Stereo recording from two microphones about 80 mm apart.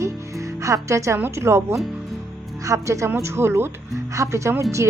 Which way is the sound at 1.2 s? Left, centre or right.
Right.